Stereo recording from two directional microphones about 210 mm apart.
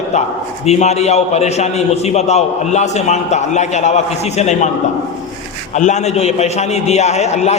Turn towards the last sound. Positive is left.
turn(degrees=30)  # may be behind; listen again after turning